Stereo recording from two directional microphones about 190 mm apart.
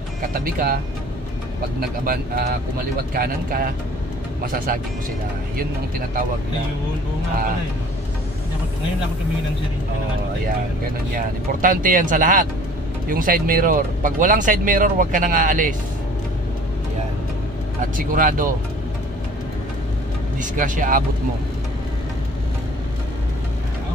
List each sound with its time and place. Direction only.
0.2 s speech: 50° right (ahead or behind)
1.8 s speech: 50° right (ahead or behind)
11.1 s speech: 45° right (ahead or behind)
17.9 s speech: 45° right (ahead or behind)
20.3 s speech: 45° right (ahead or behind)